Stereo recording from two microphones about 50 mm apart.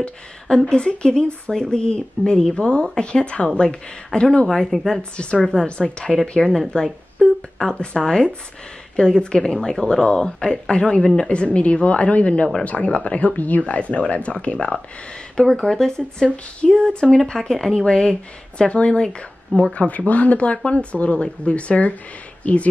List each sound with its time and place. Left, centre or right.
0.5 s a woman's voice: centre
5.1 s a woman's voice: left
15.4 s a woman's voice: centre
16.8 s a woman's voice: centre